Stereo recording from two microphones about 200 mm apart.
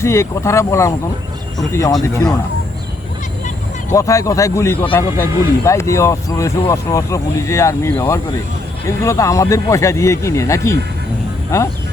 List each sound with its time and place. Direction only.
0.0 s speech: 15° left (ahead or behind)
3.9 s speech: 15° left (ahead or behind)